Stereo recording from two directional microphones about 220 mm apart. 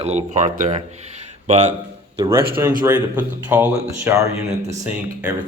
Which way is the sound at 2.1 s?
15° right (ahead or behind).